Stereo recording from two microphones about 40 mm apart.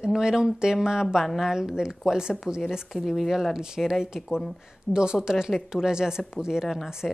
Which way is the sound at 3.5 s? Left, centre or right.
Centre.